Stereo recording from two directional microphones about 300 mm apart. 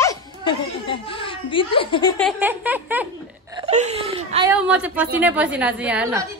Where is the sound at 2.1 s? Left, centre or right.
Centre.